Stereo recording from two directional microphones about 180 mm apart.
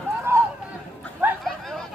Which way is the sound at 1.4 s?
Centre (ahead or behind).